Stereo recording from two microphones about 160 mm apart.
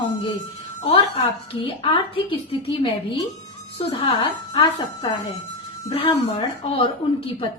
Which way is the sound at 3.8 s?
35° left (ahead or behind).